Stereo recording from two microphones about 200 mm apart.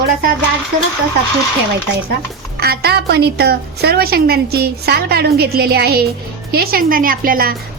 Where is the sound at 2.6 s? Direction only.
50° right (ahead or behind).